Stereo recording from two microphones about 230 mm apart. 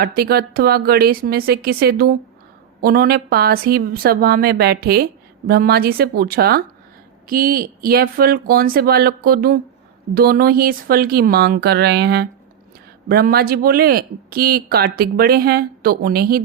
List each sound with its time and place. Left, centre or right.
0.0 s speech: right